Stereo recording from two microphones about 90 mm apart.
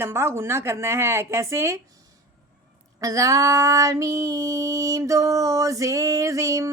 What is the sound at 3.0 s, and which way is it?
Female singing, 40° right (ahead or behind).